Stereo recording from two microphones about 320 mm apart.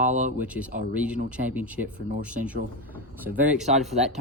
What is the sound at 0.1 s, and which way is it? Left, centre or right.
Speech, right.